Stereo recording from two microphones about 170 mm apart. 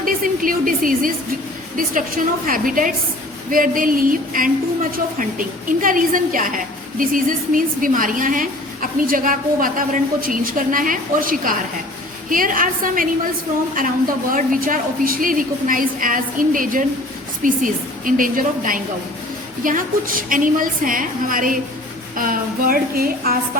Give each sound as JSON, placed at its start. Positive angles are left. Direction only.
{"t": 0.0, "sound": "a woman's voice", "side_deg": -55}
{"t": 14.3, "sound": "a woman's voice", "side_deg": -55}